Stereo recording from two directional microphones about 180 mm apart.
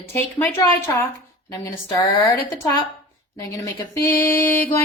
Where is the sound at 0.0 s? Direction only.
10° left (ahead or behind).